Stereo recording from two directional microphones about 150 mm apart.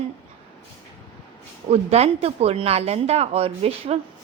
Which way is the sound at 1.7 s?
45° right (ahead or behind).